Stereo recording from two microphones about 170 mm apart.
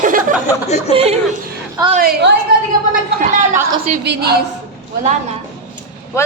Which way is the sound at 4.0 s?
70° right (ahead or behind).